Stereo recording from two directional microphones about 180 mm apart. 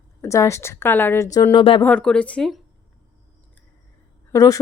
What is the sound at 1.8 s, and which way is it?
Speech, 5° left (ahead or behind).